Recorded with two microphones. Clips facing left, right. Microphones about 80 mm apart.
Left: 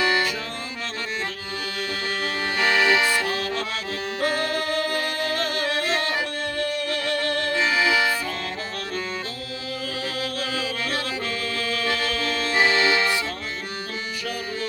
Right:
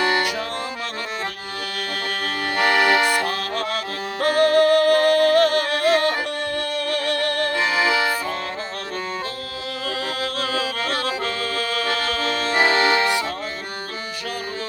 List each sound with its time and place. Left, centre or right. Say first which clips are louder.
0.0 s music: right 2 dB; right
2.2 s accordion: right 3 dB; right
4.2 s music: right 10 dB; right
10.3 s music: right 3 dB; right
12.2 s music: right 2 dB; right